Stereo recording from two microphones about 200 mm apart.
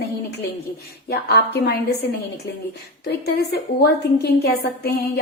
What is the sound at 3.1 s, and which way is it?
A woman's voice, 55° left (ahead or behind).